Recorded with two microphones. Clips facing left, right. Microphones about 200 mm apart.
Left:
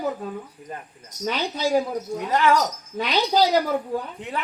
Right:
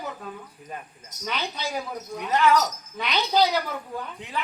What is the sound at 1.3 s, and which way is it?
Speech, 40° left (ahead or behind).